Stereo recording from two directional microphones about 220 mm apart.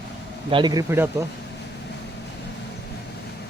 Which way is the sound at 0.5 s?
20° right (ahead or behind).